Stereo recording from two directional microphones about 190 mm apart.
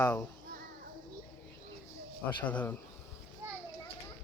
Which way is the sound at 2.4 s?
10° left (ahead or behind).